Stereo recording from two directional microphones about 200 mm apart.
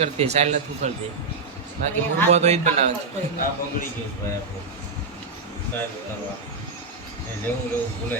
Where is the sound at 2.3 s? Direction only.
35° right (ahead or behind).